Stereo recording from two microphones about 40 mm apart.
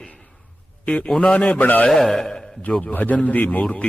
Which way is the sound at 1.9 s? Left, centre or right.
Centre.